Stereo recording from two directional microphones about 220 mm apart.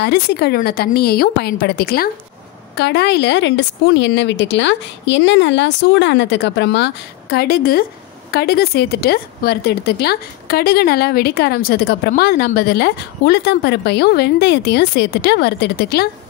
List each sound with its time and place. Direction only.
0.0 s speech: 50° left (ahead or behind)